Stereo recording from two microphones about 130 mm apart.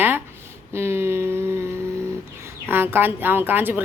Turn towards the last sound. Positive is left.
turn(degrees=-15)  # may be behind; listen again after turning